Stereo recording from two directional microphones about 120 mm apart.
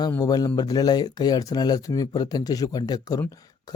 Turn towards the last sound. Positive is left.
turn(degrees=30)  # may be behind; listen again after turning